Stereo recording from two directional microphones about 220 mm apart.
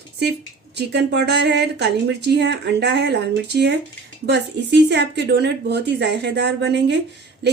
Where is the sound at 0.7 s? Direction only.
50° right (ahead or behind).